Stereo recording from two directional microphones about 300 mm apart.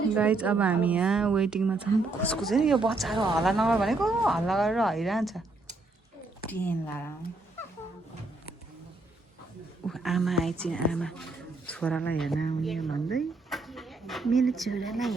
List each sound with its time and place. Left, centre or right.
0.1 s speech: centre
6.5 s speech: centre
9.8 s speech: centre